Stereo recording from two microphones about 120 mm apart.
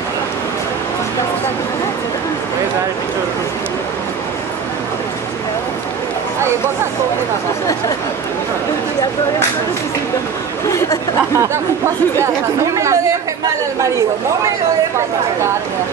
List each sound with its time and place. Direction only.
10.7 s speech: 25° left (ahead or behind)
11.3 s speech: 20° right (ahead or behind)